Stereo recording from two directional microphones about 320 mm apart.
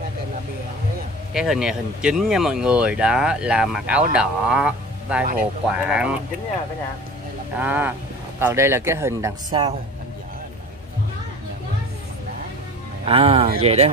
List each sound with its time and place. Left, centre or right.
1.3 s speech: centre
7.5 s speech: centre
13.0 s speech: centre